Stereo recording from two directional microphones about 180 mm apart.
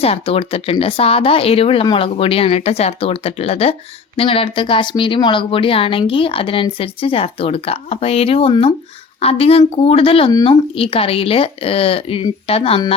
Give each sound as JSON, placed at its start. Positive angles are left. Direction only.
{"t": 0.0, "sound": "speech", "side_deg": 30}